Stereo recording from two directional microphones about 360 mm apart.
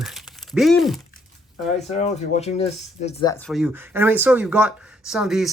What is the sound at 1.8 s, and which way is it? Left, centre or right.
Speech, centre.